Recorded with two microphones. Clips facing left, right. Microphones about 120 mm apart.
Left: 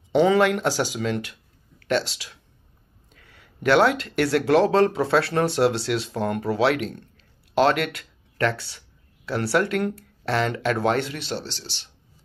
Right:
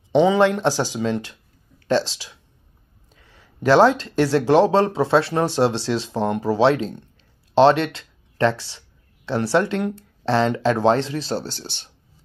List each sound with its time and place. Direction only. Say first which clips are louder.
0.1 s speech: right 2 dB; 25° right (ahead or behind); by 11.9 s 50° right (ahead or behind)